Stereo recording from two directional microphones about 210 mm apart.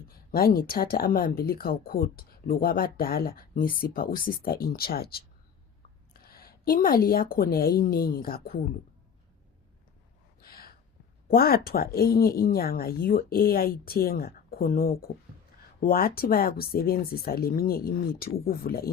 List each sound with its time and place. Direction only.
0.3 s speech: 45° left (ahead or behind)
6.2 s speech: 45° left (ahead or behind)
10.4 s gasp: 45° left (ahead or behind)
11.3 s speech: 45° left (ahead or behind)